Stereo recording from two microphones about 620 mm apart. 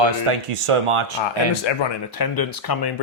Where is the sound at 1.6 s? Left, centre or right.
Left.